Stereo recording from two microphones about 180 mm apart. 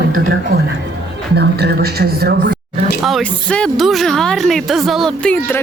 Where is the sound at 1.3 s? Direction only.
65° right (ahead or behind).